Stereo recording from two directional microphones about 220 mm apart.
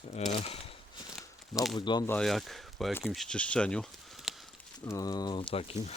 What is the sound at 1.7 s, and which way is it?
Speech, 20° left (ahead or behind).